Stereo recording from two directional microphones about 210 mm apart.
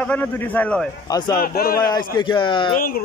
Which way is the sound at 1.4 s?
45° left (ahead or behind).